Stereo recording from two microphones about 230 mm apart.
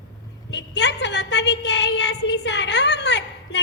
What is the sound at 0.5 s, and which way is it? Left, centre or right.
A woman's voice, left.